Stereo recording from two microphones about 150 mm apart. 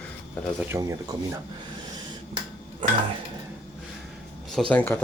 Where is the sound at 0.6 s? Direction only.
15° right (ahead or behind).